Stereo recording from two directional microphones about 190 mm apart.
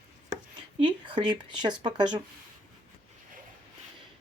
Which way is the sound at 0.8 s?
25° right (ahead or behind).